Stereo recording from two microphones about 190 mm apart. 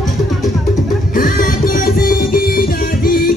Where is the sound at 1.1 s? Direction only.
45° left (ahead or behind).